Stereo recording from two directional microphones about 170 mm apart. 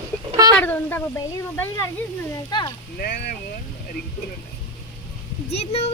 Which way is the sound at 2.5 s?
25° left (ahead or behind).